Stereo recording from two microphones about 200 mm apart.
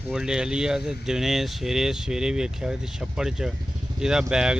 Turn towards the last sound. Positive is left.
turn(degrees=-5)  # may be behind; listen again after turning